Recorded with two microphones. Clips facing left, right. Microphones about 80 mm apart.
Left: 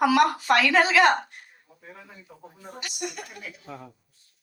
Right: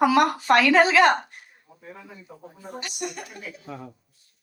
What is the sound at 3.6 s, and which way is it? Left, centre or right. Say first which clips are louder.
Speech: right 4 dB; centre.